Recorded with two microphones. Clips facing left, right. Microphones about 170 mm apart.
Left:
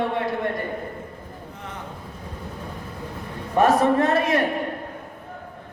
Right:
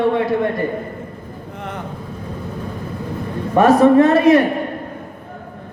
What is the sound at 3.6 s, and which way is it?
Speech, 90° right.